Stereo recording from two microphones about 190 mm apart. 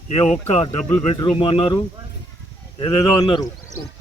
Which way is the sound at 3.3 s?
20° left (ahead or behind).